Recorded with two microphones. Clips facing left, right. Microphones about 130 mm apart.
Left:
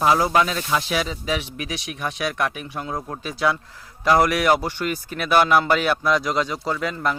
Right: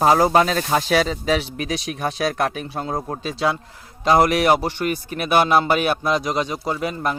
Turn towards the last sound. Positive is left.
turn(degrees=-20)  # may be behind; listen again after turning